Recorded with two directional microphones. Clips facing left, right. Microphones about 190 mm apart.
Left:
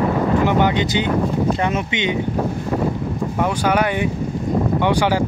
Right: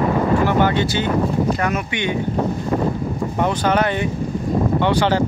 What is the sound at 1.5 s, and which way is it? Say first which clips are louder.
Speech: left 1 dB; 25° left (ahead or behind).